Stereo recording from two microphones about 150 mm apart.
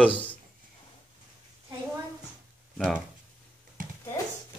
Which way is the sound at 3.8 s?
65° right (ahead or behind).